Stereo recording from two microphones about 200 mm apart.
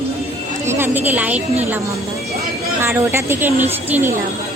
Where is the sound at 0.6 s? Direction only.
10° right (ahead or behind).